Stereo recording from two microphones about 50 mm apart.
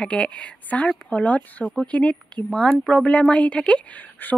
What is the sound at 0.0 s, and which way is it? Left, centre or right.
A woman's voice, left.